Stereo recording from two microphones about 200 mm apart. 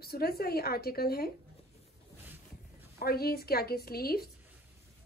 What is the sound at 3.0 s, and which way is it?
A woman's voice, 50° left (ahead or behind).